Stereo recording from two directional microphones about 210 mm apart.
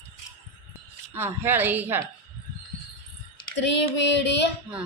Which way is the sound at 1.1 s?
10° right (ahead or behind).